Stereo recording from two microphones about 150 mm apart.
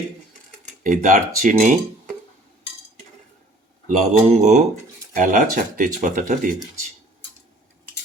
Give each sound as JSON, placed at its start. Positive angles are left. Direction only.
{"t": 0.9, "sound": "speech", "side_deg": -60}
{"t": 3.8, "sound": "speech", "side_deg": -50}
{"t": 5.1, "sound": "speech", "side_deg": -60}